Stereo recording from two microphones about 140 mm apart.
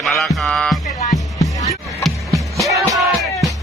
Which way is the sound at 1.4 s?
25° left (ahead or behind).